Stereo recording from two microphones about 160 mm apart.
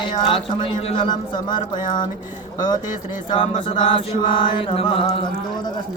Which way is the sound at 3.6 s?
30° left (ahead or behind).